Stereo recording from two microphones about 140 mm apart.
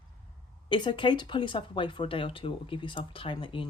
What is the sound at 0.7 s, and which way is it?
Speech, 35° left (ahead or behind).